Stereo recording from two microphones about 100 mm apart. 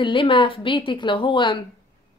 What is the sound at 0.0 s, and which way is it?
A woman's voice, 55° left (ahead or behind).